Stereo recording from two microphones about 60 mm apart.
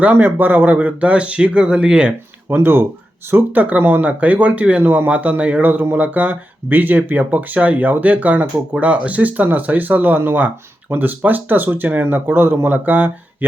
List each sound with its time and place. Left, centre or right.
0.0 s speech: right
2.5 s speech: right